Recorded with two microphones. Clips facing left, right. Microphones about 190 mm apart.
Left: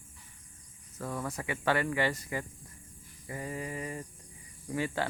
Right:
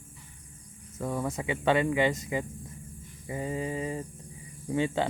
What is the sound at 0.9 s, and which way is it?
Speech, 20° right (ahead or behind).